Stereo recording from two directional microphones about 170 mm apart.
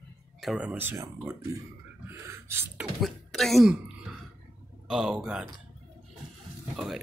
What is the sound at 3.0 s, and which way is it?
Speech, centre (ahead or behind).